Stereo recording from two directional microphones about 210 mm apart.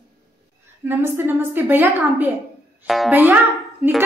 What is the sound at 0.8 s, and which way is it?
A woman's voice, 10° right (ahead or behind).